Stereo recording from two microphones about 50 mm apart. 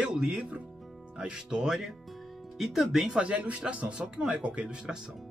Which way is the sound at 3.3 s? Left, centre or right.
Right.